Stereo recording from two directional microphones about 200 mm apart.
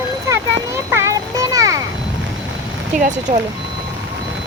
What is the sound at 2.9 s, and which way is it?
Speech, 40° right (ahead or behind).